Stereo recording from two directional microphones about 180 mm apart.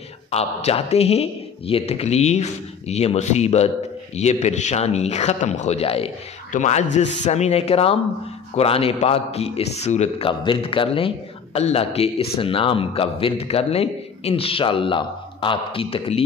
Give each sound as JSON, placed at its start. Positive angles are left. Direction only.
{"t": 0.3, "sound": "a man's voice", "side_deg": 35}